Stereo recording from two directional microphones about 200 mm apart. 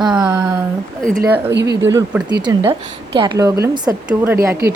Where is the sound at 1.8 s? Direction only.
15° right (ahead or behind).